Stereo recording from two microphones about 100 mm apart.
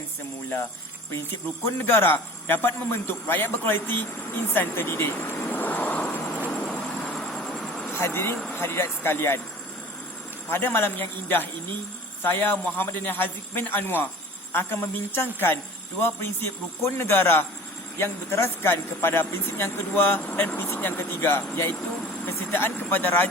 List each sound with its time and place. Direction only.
1.6 s speech: 25° left (ahead or behind)
5.2 s vehicle: 20° left (ahead or behind)
7.1 s a sound: 5° left (ahead or behind)
7.9 s speech: 25° left (ahead or behind)
10.5 s speech: 25° left (ahead or behind)